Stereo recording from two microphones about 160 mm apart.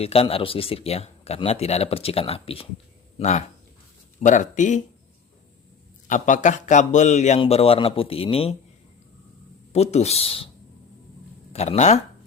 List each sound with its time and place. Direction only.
0.0 s speech: 40° left (ahead or behind)
3.2 s speech: 45° left (ahead or behind)
6.1 s speech: 50° left (ahead or behind); by 8.5 s 35° left (ahead or behind)
9.7 s speech: 45° left (ahead or behind)
11.5 s speech: 40° left (ahead or behind)